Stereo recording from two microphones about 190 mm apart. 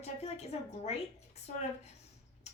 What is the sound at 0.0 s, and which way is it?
Speech, 35° left (ahead or behind).